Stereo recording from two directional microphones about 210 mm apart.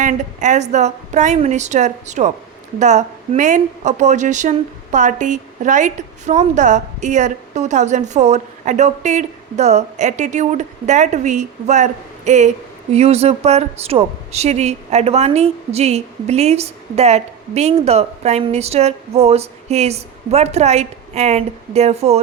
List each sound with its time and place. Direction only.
0.0 s a woman's voice: 35° right (ahead or behind)